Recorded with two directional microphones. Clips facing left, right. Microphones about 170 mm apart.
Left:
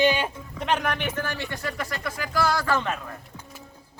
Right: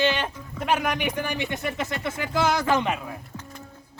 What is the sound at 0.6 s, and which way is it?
A man's voice, 10° right (ahead or behind).